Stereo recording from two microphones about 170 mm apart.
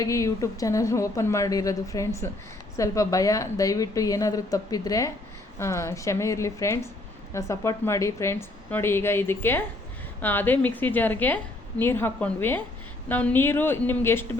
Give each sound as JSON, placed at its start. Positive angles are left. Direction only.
{"t": 0.0, "sound": "a woman's voice", "side_deg": 20}